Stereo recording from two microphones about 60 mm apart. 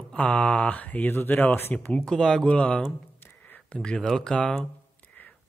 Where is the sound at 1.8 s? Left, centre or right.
Left.